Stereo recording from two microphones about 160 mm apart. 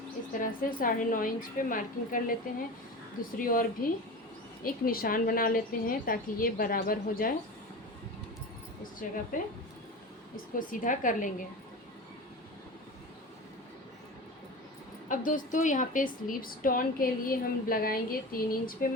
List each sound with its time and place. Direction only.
0.4 s a woman's voice: 60° left (ahead or behind)
9.3 s a woman's voice: 55° left (ahead or behind)
10.5 s a woman's voice: 60° left (ahead or behind)
15.1 s a woman's voice: 55° left (ahead or behind)